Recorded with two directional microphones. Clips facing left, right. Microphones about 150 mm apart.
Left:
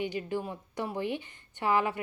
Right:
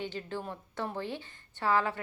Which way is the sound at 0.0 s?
15° left (ahead or behind).